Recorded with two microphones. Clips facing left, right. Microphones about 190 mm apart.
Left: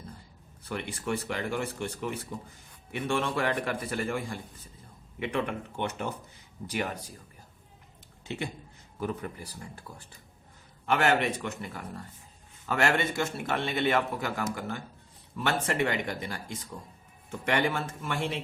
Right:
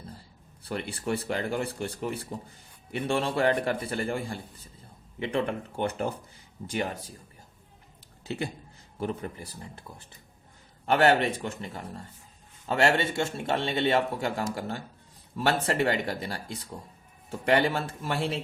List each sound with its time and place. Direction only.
0.6 s speech: 35° right (ahead or behind)
8.3 s speech: 35° right (ahead or behind)
10.8 s speech: 35° right (ahead or behind)